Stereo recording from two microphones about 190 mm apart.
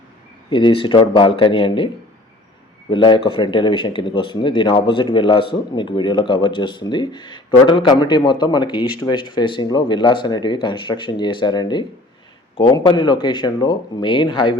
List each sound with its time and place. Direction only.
0.5 s speech: 25° left (ahead or behind)
2.9 s speech: 25° left (ahead or behind)